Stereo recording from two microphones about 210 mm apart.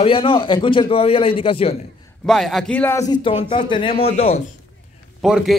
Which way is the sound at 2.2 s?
Centre (ahead or behind).